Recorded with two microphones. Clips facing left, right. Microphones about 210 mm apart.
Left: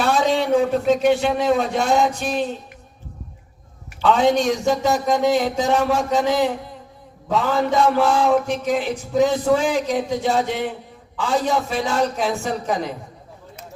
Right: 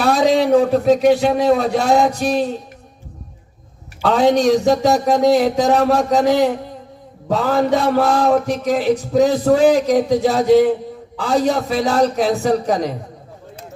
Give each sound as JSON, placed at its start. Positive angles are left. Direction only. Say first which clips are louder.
{"t": 0.0, "sound": "a man's voice", "louder": "right 4 dB", "side_deg": -35}
{"t": 4.0, "sound": "a man's voice", "louder": "right 3 dB", "side_deg": -35}